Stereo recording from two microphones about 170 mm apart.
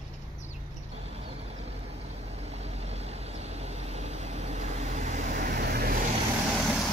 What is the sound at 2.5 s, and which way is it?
Vehicle, 40° right (ahead or behind).